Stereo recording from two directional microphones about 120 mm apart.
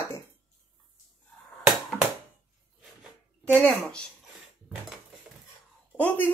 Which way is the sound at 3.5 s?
10° left (ahead or behind).